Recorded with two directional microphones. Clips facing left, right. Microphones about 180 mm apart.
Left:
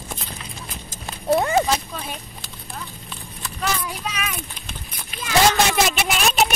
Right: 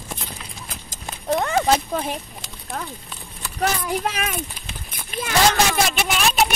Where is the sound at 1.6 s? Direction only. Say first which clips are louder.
Right 5 dB; 55° right (ahead or behind).